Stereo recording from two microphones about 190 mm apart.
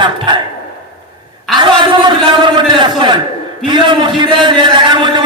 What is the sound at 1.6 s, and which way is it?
A man's voice, 25° right (ahead or behind).